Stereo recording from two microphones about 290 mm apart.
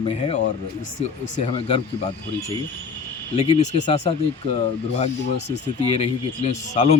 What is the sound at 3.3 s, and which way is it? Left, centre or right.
Speech, left.